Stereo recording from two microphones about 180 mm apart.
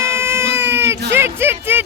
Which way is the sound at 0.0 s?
15° right (ahead or behind).